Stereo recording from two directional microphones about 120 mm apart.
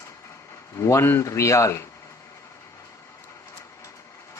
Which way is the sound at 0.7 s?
25° left (ahead or behind).